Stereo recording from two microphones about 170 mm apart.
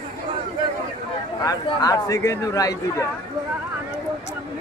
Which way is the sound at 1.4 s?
20° left (ahead or behind).